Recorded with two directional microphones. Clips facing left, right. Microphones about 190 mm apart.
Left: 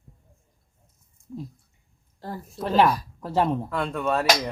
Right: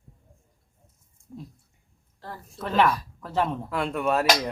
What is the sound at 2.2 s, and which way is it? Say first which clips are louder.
A woman's voice: left 4 dB; 35° left (ahead or behind).